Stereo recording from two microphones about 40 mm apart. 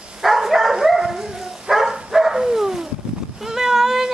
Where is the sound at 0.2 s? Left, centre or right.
Centre.